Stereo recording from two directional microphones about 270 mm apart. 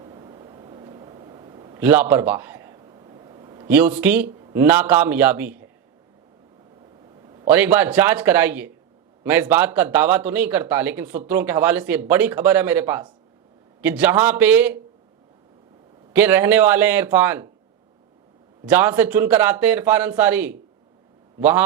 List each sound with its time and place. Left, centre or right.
0.0 s a sound: centre
4.3 s a man's voice: centre
7.3 s a man's voice: centre
16.1 s a man's voice: centre
18.6 s a man's voice: centre